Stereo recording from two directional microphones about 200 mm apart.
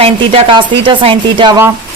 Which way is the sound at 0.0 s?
30° right (ahead or behind).